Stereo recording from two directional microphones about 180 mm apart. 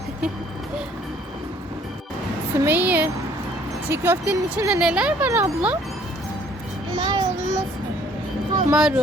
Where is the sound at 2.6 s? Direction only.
10° right (ahead or behind).